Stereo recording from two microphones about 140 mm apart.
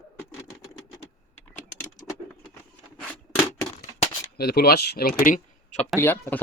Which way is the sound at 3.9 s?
45° left (ahead or behind).